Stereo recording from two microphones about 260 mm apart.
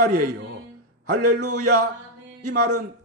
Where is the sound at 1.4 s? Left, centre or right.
Right.